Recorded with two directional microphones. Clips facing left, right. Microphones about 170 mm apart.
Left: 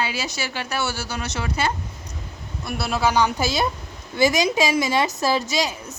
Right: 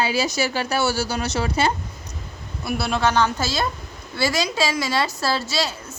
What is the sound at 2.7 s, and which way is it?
A woman's voice, centre (ahead or behind).